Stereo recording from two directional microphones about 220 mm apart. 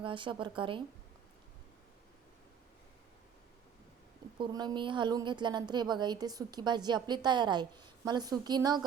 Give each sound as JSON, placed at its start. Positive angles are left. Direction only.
{"t": 0.0, "sound": "a woman's voice", "side_deg": -20}
{"t": 4.4, "sound": "a woman's voice", "side_deg": -20}